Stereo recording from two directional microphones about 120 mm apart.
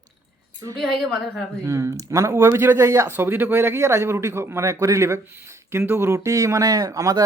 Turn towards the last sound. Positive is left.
turn(degrees=-30)  # may be behind; listen again after turning